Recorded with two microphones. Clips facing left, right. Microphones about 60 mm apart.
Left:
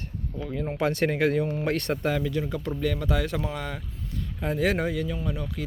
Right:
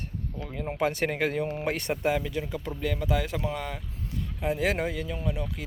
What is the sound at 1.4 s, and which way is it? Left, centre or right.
Speech, right.